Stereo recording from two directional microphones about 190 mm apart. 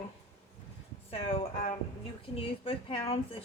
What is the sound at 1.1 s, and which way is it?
A woman's voice, 30° left (ahead or behind).